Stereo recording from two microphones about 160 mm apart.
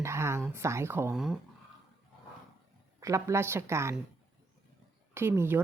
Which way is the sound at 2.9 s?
20° right (ahead or behind).